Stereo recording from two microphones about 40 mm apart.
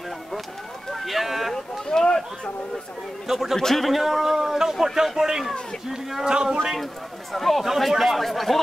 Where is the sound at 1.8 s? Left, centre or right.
Centre.